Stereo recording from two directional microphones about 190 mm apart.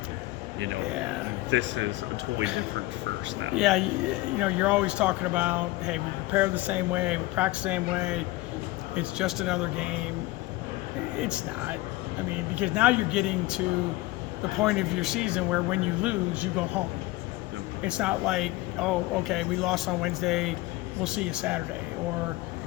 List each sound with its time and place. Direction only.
1.5 s speech: 70° right (ahead or behind)
3.5 s speech: centre (ahead or behind)
11.2 s speech: 5° right (ahead or behind)
12.5 s speech: 5° right (ahead or behind)
14.6 s speech: centre (ahead or behind)
17.8 s speech: 5° right (ahead or behind)